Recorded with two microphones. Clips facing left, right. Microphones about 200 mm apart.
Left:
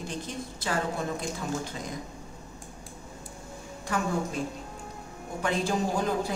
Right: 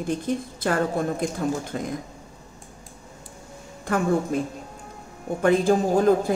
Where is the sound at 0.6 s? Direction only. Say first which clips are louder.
Right 5 dB; 55° right (ahead or behind).